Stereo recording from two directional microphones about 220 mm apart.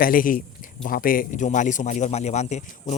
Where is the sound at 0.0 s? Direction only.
40° left (ahead or behind).